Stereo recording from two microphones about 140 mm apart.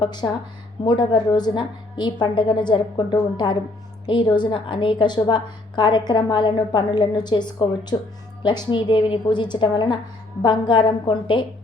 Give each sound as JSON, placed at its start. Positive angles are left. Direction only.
{"t": 0.0, "sound": "a woman's voice", "side_deg": 30}